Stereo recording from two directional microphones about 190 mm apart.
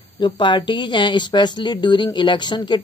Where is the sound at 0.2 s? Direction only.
25° left (ahead or behind).